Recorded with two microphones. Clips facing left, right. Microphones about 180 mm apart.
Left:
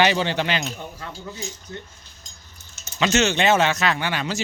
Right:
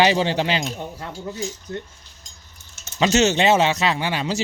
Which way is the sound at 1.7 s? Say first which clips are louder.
Right 6 dB; 55° right (ahead or behind).